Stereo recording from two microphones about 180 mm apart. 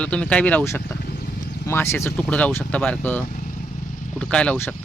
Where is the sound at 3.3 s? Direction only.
45° left (ahead or behind).